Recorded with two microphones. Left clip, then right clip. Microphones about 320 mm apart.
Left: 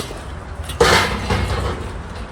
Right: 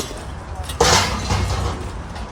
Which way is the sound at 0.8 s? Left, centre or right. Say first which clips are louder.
Left 2 dB; centre.